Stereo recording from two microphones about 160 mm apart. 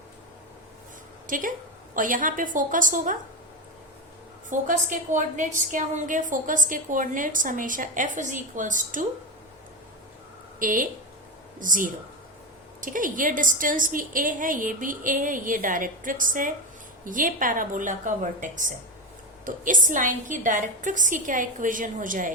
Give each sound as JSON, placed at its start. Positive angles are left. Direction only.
{"t": 1.3, "sound": "a woman's voice", "side_deg": -55}
{"t": 4.4, "sound": "a woman's voice", "side_deg": -55}
{"t": 10.6, "sound": "a woman's voice", "side_deg": -55}